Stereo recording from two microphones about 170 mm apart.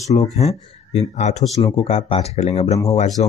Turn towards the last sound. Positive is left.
turn(degrees=45)  # may be behind; listen again after turning